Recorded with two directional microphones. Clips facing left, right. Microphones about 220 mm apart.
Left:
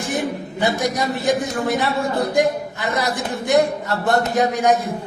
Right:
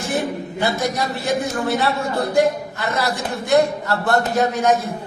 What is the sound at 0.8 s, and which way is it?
A man's voice, 15° left (ahead or behind).